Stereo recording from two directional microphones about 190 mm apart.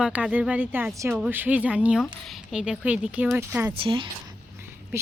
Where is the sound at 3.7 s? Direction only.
30° right (ahead or behind).